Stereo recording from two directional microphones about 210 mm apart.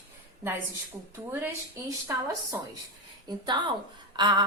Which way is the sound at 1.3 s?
10° right (ahead or behind).